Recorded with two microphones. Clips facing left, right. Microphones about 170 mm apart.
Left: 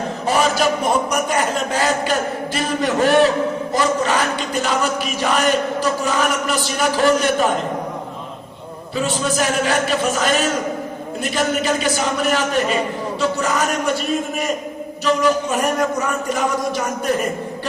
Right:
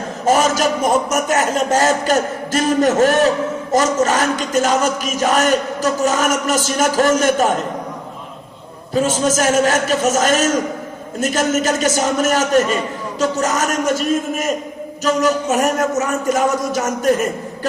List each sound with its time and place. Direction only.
0.3 s a man's voice: 45° right (ahead or behind)
9.0 s a man's voice: 45° right (ahead or behind)